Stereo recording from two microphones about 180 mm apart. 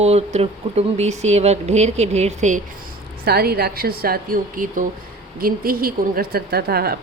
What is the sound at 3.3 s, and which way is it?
A woman's voice, 60° right (ahead or behind).